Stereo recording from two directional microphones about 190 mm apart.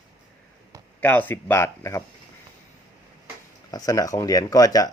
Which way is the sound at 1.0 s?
10° left (ahead or behind).